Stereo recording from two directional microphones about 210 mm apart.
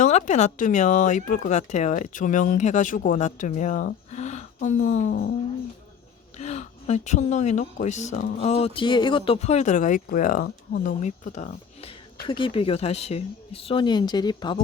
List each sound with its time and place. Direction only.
0.0 s speech: 35° left (ahead or behind)
6.3 s speech: 30° left (ahead or behind)